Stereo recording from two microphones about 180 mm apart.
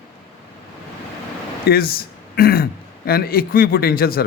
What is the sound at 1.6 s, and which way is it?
Speech, 55° left (ahead or behind).